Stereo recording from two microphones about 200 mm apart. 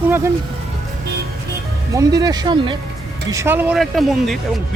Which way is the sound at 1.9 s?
20° right (ahead or behind).